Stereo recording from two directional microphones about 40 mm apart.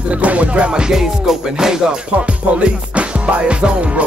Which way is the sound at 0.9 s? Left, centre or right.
Centre.